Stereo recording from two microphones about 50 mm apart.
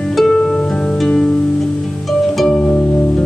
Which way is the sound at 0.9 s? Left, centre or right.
Centre.